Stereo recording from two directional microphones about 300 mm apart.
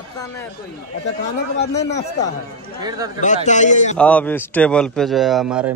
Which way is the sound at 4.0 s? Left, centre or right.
Centre.